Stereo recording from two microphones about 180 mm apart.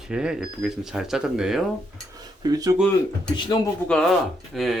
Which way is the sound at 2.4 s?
20° right (ahead or behind).